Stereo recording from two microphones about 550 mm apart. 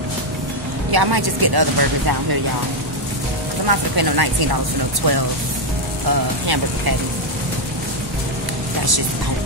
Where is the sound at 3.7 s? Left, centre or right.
Right.